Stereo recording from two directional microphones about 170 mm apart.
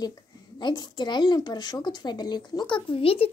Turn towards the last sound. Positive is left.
turn(degrees=35)  # may be behind; listen again after turning